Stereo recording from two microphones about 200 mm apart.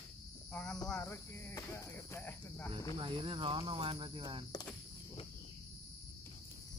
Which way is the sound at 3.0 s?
25° right (ahead or behind).